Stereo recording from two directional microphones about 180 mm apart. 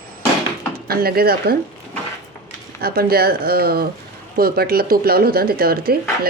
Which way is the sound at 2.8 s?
60° right (ahead or behind).